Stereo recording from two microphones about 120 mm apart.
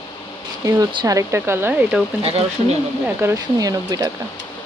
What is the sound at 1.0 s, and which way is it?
Speech, 25° right (ahead or behind).